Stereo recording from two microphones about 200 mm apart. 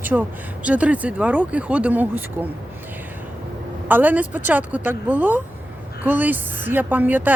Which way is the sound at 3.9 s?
10° right (ahead or behind).